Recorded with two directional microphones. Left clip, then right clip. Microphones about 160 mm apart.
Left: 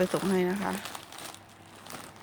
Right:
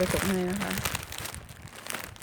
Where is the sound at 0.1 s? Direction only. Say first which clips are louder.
Right 1 dB; centre (ahead or behind).